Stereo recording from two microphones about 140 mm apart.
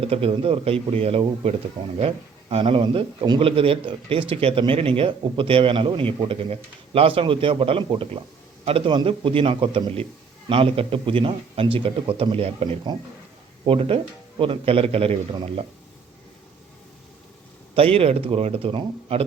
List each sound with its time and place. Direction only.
0.0 s a man's voice: 45° right (ahead or behind)
13.7 s speech: 40° right (ahead or behind)
17.7 s a man's voice: 45° right (ahead or behind)